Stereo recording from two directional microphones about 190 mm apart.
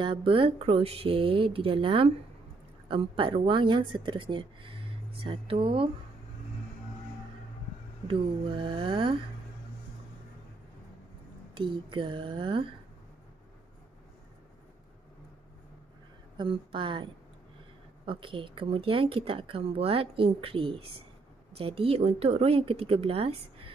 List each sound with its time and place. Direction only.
0.0 s speech: 25° right (ahead or behind)
8.7 s speech: 25° right (ahead or behind)
11.5 s speech: 25° right (ahead or behind)
16.3 s speech: 25° right (ahead or behind)